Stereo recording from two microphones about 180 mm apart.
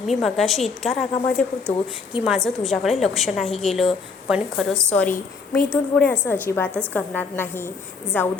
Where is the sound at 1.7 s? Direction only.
40° left (ahead or behind).